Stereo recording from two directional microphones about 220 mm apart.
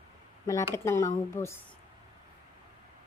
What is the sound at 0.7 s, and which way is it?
Speech, 15° left (ahead or behind).